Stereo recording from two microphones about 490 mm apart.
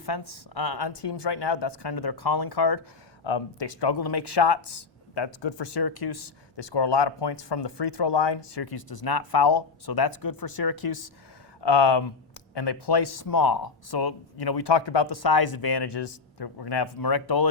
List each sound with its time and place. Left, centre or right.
0.0 s speech: left
3.2 s speech: left